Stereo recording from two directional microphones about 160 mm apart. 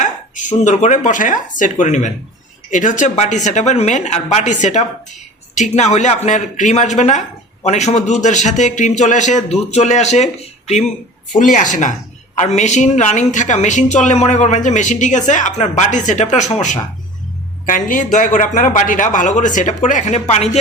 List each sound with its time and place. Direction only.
0.0 s a woman's voice: 50° left (ahead or behind)
11.5 s a woman's voice: 50° left (ahead or behind)